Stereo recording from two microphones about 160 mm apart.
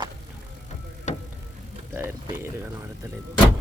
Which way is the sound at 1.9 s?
15° right (ahead or behind).